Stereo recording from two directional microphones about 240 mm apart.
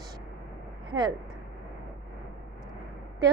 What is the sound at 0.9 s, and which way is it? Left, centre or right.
Speech, centre.